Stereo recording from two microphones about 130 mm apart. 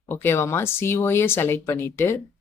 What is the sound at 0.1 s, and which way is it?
A woman's voice, 20° left (ahead or behind).